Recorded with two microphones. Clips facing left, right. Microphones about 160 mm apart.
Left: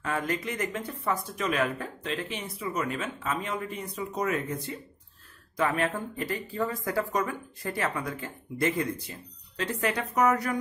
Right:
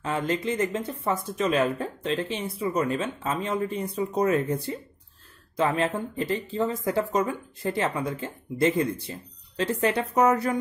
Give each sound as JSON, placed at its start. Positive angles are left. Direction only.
{"t": 0.0, "sound": "speech", "side_deg": -25}